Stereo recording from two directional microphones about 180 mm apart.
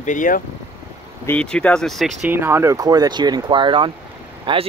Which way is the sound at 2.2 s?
10° right (ahead or behind).